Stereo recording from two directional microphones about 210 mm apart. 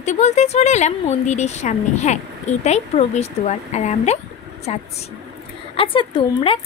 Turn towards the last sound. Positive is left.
turn(degrees=25)  # may be behind; listen again after turning